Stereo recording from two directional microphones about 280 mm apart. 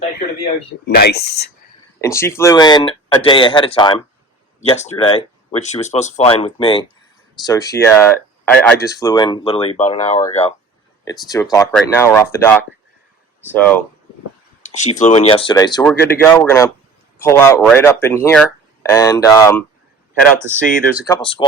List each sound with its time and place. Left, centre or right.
0.9 s speech: left
2.0 s speech: centre
11.0 s speech: centre
14.6 s speech: left; by 21.2 s centre
21.2 s speech: centre